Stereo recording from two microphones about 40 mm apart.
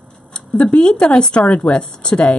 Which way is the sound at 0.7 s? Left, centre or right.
Left.